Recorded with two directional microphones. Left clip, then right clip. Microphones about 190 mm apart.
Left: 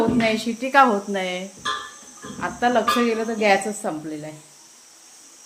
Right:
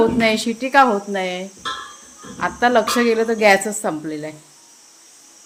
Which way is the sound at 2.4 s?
30° right (ahead or behind).